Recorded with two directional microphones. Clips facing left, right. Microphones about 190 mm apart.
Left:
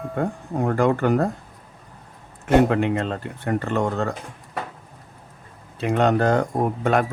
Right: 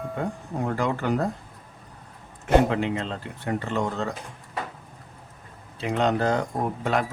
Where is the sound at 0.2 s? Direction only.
50° left (ahead or behind).